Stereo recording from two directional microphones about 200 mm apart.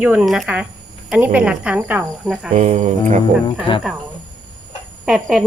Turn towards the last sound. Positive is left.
turn(degrees=0)  # may be behind; listen again after turning